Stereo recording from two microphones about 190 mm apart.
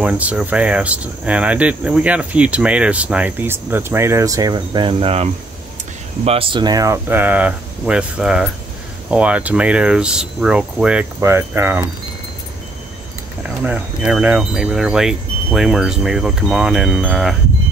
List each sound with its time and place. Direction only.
0.0 s speech: 5° right (ahead or behind)
13.4 s chime: 5° right (ahead or behind)